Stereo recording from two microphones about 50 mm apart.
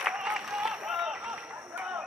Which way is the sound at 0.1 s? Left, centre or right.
Centre.